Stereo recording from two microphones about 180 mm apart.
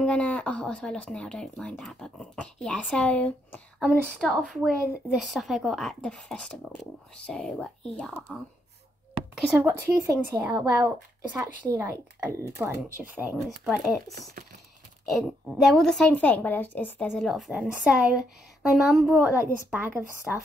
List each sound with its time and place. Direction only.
0.0 s speech: 5° left (ahead or behind)
9.3 s speech: 10° right (ahead or behind)
15.0 s speech: centre (ahead or behind)
19.3 s speech: 10° right (ahead or behind)